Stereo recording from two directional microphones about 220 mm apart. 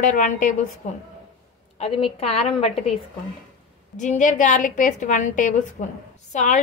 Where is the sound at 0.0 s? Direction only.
35° left (ahead or behind).